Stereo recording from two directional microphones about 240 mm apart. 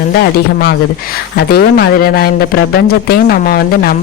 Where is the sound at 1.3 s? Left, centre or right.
Left.